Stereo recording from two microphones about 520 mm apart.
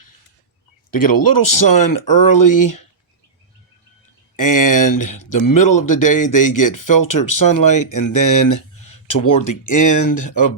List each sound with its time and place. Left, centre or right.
0.9 s speech: left
4.4 s speech: left